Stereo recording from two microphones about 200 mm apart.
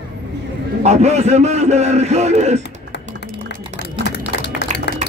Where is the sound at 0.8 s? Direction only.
35° right (ahead or behind).